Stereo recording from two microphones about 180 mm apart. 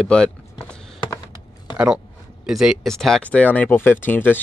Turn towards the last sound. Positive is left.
turn(degrees=10)  # may be behind; listen again after turning